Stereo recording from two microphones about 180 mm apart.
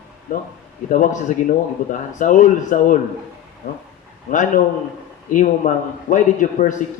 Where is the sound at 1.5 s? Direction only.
45° left (ahead or behind).